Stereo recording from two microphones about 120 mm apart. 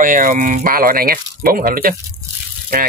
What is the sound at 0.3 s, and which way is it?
Speech, 90° right.